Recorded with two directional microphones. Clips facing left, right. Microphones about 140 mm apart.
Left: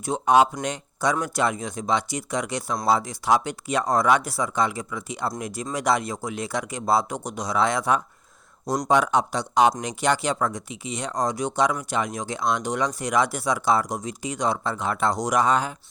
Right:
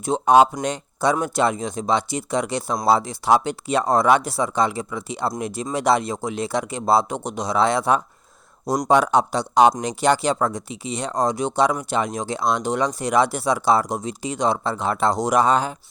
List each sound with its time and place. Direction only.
0.0 s speech: 30° right (ahead or behind)